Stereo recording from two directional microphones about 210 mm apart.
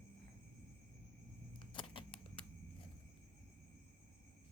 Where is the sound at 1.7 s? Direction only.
25° left (ahead or behind).